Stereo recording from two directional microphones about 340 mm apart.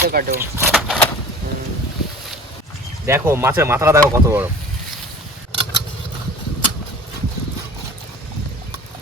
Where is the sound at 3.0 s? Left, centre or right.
Centre.